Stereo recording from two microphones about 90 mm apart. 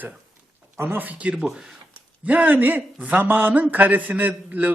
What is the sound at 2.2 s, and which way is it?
A man's voice, 15° right (ahead or behind).